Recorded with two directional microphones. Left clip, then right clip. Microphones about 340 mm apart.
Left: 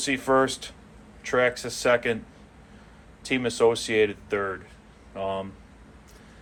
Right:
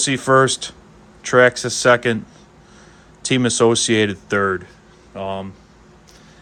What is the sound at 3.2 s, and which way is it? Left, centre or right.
Speech, right.